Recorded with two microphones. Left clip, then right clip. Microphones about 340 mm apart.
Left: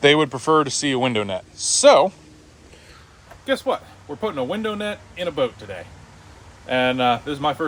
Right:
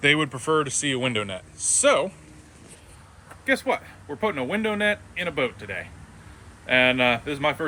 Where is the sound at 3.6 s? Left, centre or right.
Centre.